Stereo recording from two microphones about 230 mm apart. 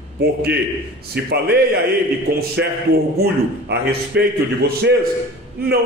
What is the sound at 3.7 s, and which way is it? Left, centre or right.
Speech, right.